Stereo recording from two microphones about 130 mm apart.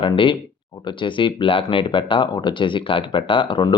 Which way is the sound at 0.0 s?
40° left (ahead or behind).